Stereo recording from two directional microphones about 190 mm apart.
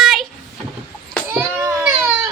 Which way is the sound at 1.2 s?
10° right (ahead or behind).